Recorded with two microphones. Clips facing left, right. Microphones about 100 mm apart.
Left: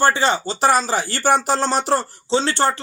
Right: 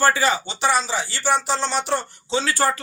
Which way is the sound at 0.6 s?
45° left (ahead or behind).